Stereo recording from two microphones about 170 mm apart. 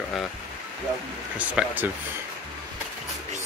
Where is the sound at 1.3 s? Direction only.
5° right (ahead or behind).